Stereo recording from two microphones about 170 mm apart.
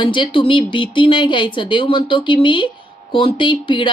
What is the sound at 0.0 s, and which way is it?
Speech, 30° left (ahead or behind).